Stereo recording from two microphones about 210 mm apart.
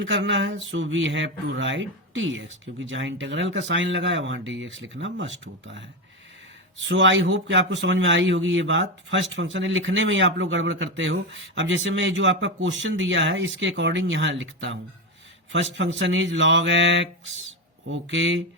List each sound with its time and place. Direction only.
0.0 s speech: 60° right (ahead or behind)